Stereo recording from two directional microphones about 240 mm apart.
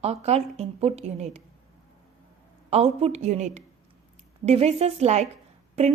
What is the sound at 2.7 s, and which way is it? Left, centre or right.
Speech, right.